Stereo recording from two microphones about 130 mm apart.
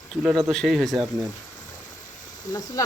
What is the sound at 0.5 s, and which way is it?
Speech, centre (ahead or behind).